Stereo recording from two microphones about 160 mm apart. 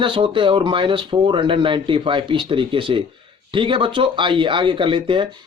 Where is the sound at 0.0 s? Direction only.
30° right (ahead or behind).